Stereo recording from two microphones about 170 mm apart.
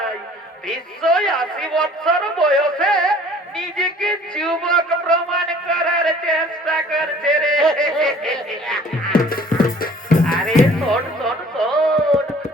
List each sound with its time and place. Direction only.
1.0 s a man's voice: 5° left (ahead or behind)
4.9 s music: 5° left (ahead or behind)
9.3 s music: 55° left (ahead or behind)
10.8 s music: 5° left (ahead or behind)